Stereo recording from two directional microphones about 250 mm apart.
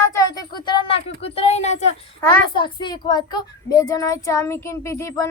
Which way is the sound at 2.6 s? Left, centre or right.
Centre.